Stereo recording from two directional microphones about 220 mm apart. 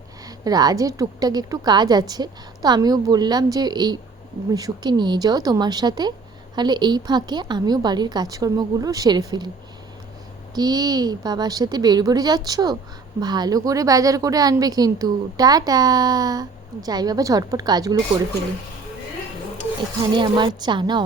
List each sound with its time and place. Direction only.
0.3 s a woman's voice: 15° right (ahead or behind)
10.5 s a woman's voice: 20° right (ahead or behind)
20.1 s a woman's voice: 20° right (ahead or behind)